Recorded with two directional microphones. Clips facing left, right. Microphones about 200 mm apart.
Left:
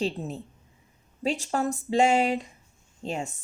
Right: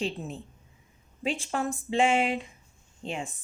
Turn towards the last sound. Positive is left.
turn(degrees=40)  # may be behind; listen again after turning